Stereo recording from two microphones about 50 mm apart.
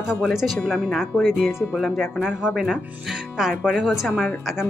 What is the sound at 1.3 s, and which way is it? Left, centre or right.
Speech, right.